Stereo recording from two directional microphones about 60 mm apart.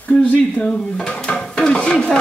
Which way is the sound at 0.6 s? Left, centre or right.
Centre.